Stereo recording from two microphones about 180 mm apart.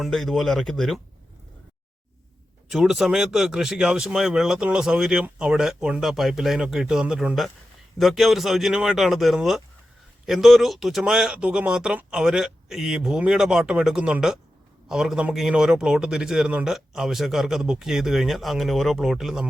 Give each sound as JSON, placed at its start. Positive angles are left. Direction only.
{"t": 0.0, "sound": "speech", "side_deg": 0}
{"t": 2.6, "sound": "speech", "side_deg": 0}